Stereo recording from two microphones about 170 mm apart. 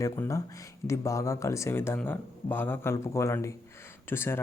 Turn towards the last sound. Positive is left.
turn(degrees=15)  # may be behind; listen again after turning